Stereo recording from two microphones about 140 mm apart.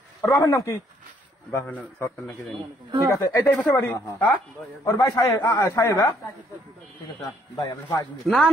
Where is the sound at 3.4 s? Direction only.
10° left (ahead or behind).